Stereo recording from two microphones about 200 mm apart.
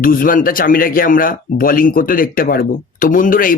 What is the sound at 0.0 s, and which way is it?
Speech, 45° left (ahead or behind).